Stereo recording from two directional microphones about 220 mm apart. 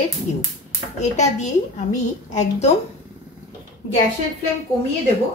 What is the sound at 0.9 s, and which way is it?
A woman's voice, 30° left (ahead or behind).